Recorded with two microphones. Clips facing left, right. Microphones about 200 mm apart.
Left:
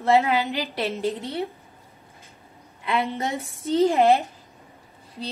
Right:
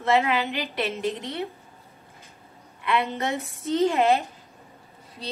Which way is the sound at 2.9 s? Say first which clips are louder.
Even; 30° left (ahead or behind).